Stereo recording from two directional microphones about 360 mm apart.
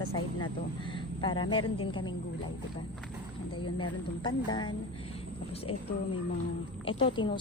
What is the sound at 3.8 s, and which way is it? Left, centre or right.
A woman's voice, centre.